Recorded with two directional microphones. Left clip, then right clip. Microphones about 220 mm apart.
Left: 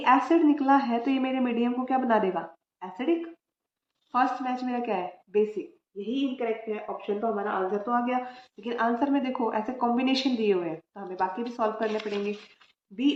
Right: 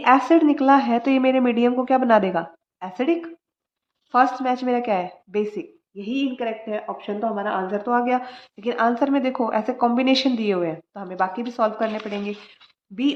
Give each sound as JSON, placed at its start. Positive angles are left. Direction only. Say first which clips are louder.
{"t": 0.0, "sound": "speech", "louder": "right 5 dB", "side_deg": -50}